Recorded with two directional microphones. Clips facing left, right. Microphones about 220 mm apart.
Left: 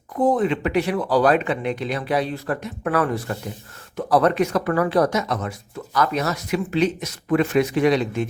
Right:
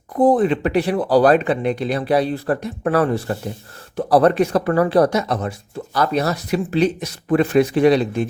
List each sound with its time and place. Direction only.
0.2 s speech: 35° right (ahead or behind)